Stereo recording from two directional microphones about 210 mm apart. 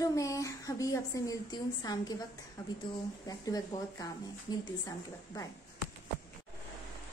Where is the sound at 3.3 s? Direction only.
15° left (ahead or behind).